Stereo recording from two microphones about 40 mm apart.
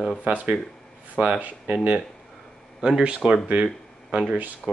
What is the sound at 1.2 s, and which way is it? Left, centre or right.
Speech, right.